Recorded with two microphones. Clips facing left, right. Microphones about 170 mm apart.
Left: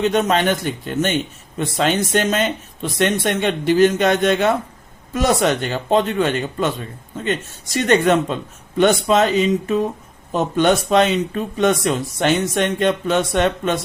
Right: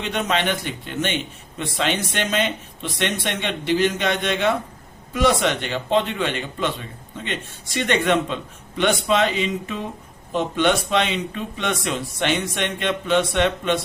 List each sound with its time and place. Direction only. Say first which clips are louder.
0.0 s a man's voice: left 6 dB; 40° left (ahead or behind)